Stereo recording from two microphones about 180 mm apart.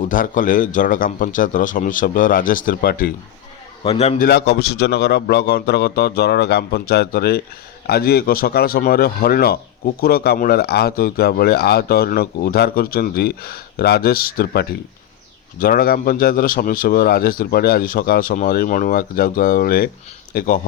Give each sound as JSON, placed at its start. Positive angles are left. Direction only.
{"t": 0.0, "sound": "speech", "side_deg": 45}
{"t": 3.8, "sound": "a man's voice", "side_deg": 35}
{"t": 4.3, "sound": "speech", "side_deg": 65}